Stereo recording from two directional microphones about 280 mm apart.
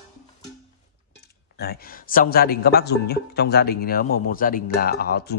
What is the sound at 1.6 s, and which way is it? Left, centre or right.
A man's voice, left.